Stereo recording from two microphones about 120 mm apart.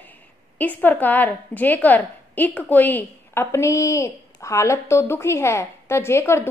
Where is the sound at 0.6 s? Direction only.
15° left (ahead or behind).